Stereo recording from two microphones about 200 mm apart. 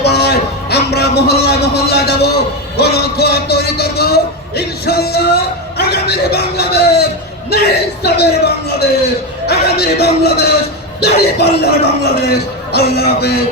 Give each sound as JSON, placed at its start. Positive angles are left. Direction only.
{"t": 0.0, "sound": "a sound", "side_deg": 55}
{"t": 2.7, "sound": "a man's voice", "side_deg": 55}
{"t": 11.5, "sound": "a man's voice", "side_deg": 55}